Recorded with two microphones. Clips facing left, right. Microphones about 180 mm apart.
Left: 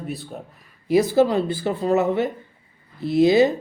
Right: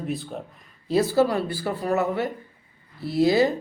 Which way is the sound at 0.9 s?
15° left (ahead or behind).